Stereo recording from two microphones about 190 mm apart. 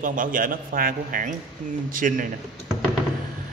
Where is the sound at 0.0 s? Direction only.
45° right (ahead or behind).